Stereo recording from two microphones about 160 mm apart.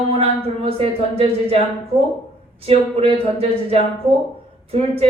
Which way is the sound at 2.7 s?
40° right (ahead or behind).